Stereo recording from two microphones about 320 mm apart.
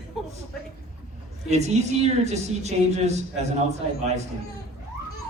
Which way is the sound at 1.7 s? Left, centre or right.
Right.